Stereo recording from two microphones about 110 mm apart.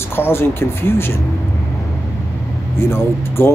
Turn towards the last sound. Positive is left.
turn(degrees=20)  # may be behind; listen again after turning